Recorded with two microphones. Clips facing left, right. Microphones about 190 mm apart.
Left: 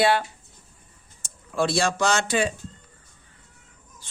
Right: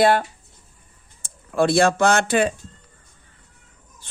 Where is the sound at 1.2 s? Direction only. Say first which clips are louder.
Right 5 dB; 55° right (ahead or behind).